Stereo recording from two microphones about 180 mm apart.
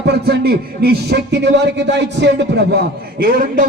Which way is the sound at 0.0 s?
65° right (ahead or behind).